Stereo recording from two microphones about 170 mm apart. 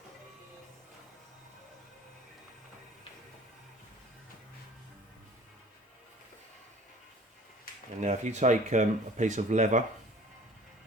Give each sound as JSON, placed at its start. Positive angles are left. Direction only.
{"t": 8.0, "sound": "speech", "side_deg": -45}